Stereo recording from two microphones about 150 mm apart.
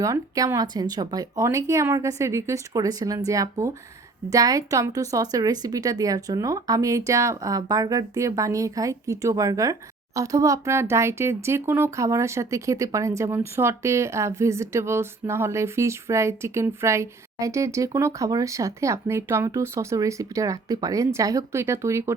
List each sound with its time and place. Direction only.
0.0 s speech: 20° right (ahead or behind)